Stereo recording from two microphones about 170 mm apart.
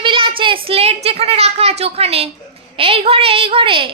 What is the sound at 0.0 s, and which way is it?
A woman's voice, 30° right (ahead or behind).